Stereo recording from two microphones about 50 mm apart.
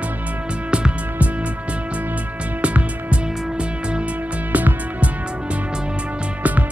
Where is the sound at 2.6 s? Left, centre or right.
Right.